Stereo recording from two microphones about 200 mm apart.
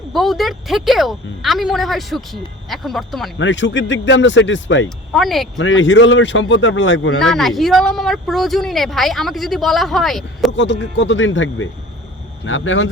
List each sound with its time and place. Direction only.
0.1 s speech: centre (ahead or behind)
3.3 s a man's voice: 65° left (ahead or behind)
5.1 s speech: centre (ahead or behind)
5.5 s a man's voice: 75° left (ahead or behind)
7.2 s speech: centre (ahead or behind)
10.5 s a man's voice: 65° left (ahead or behind)